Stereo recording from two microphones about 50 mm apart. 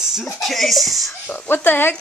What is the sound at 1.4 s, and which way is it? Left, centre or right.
Speech, left.